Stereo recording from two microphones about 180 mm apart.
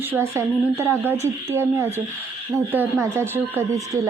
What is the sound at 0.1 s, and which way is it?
Speech, 15° right (ahead or behind).